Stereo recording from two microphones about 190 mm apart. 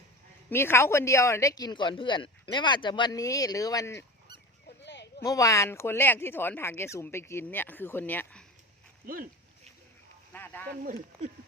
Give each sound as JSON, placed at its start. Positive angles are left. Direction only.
{"t": 0.5, "sound": "speech", "side_deg": 15}
{"t": 4.8, "sound": "a sound", "side_deg": 65}
{"t": 5.2, "sound": "speech", "side_deg": 15}
{"t": 10.3, "sound": "speech", "side_deg": 10}
{"t": 10.8, "sound": "speech", "side_deg": -45}